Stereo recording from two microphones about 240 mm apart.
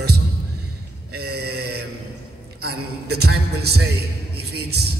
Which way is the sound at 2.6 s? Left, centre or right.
Right.